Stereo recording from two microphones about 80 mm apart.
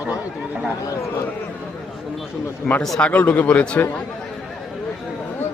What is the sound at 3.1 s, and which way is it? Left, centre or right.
Speech, left.